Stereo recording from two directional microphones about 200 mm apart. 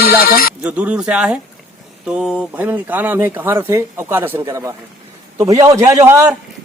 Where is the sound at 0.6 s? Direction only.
5° right (ahead or behind).